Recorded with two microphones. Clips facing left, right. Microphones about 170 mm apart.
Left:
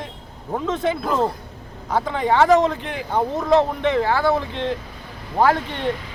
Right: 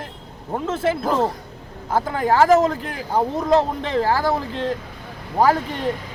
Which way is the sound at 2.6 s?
40° right (ahead or behind).